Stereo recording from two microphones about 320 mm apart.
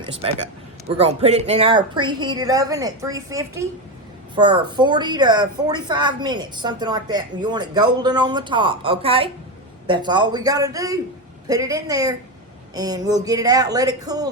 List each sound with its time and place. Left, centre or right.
0.0 s a woman's voice: centre